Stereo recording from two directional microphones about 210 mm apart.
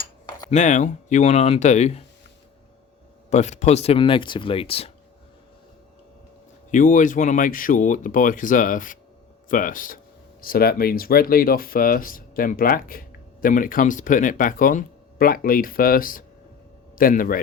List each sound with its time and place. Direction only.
0.5 s speech: 35° left (ahead or behind)
3.2 s speech: 35° left (ahead or behind)
6.7 s speech: 40° left (ahead or behind)